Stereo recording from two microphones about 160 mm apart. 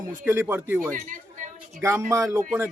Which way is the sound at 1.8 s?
20° right (ahead or behind).